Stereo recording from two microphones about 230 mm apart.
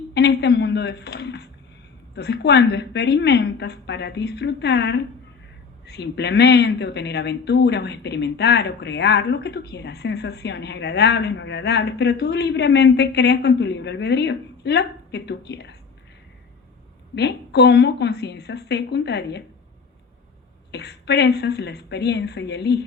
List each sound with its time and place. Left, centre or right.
0.1 s speech: left
17.2 s speech: left
20.7 s speech: left